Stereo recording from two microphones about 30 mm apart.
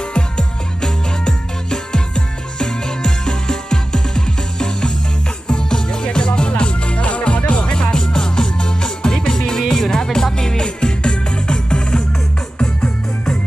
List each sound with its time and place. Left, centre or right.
0.0 s music: left
12.8 s music: centre